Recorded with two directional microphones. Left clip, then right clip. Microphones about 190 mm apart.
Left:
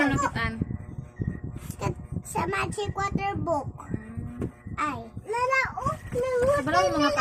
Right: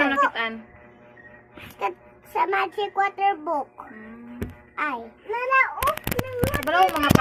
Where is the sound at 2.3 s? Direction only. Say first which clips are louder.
Right 6 dB; 20° left (ahead or behind).